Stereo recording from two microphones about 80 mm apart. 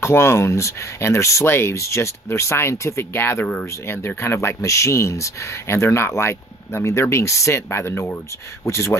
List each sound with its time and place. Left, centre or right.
0.0 s speech: left